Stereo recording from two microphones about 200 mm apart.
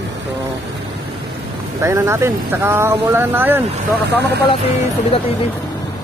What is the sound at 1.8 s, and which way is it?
Speech, 15° right (ahead or behind).